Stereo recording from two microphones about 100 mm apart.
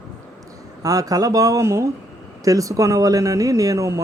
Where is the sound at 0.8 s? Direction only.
35° right (ahead or behind).